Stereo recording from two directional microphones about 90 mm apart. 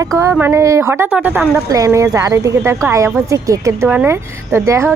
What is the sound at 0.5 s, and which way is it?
Speech, 35° right (ahead or behind).